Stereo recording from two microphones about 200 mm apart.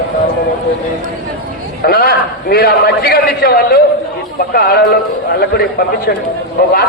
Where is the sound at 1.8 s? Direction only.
50° left (ahead or behind).